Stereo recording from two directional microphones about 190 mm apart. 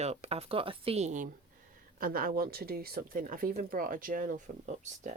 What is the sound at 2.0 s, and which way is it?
Speech, 50° right (ahead or behind).